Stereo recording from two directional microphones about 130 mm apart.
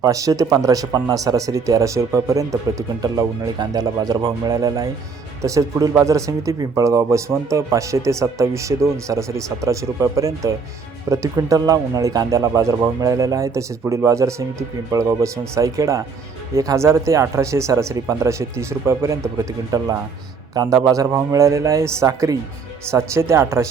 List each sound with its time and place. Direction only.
0.0 s a man's voice: 25° right (ahead or behind)